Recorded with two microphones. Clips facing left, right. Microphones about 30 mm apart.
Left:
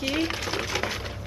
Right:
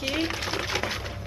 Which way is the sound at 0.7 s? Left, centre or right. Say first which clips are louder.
Even; centre.